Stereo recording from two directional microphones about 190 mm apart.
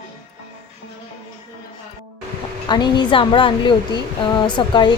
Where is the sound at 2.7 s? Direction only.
25° left (ahead or behind).